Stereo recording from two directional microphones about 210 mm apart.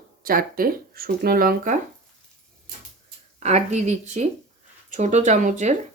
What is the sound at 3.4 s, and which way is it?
Speech, 30° right (ahead or behind).